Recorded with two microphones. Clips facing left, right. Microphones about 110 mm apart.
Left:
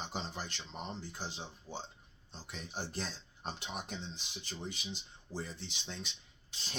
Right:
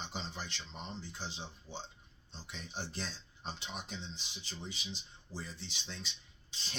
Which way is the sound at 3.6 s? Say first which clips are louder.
Left 2 dB; 50° left (ahead or behind).